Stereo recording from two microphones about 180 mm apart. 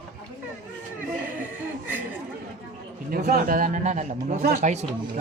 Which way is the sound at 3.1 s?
55° right (ahead or behind).